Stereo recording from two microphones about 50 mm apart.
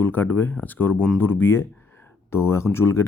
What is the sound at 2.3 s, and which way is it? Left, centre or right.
Speech, left.